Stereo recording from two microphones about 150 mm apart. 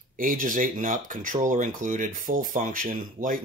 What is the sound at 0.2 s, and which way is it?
Speech, 65° right (ahead or behind).